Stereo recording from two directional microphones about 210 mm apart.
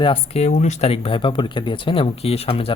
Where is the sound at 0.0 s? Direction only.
30° left (ahead or behind).